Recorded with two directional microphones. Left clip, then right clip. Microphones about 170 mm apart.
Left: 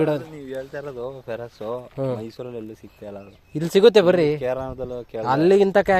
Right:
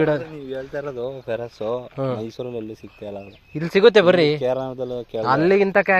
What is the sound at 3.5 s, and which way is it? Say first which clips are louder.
Speech: even; 20° left (ahead or behind).